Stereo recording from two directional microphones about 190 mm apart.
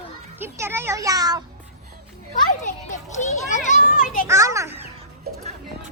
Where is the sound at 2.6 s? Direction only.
40° left (ahead or behind).